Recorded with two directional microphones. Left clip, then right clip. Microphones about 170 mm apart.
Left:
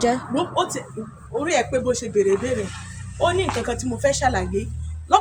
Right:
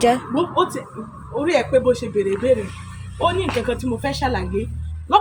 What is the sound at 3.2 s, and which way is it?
A man's voice, 25° left (ahead or behind).